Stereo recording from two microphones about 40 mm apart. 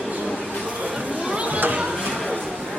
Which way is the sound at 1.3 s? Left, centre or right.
Right.